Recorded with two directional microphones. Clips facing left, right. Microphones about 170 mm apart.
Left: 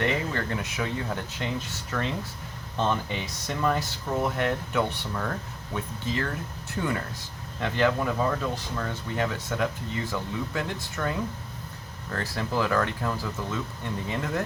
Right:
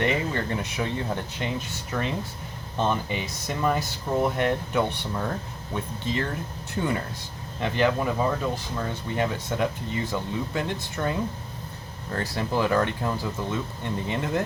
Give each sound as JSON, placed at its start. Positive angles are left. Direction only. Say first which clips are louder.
{"t": 0.0, "sound": "speech", "louder": "right 2 dB", "side_deg": -20}